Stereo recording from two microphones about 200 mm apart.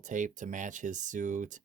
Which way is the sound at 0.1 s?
40° right (ahead or behind).